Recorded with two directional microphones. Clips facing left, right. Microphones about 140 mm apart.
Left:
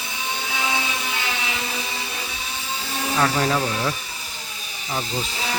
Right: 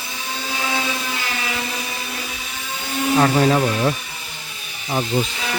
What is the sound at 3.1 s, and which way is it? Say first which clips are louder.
Speech: right 5 dB; 25° right (ahead or behind).